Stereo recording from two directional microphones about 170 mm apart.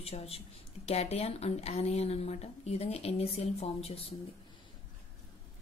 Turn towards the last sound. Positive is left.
turn(degrees=35)  # may be behind; listen again after turning